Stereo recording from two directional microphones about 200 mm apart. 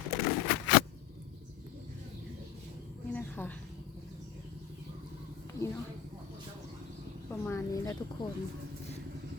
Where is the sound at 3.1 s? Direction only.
10° left (ahead or behind).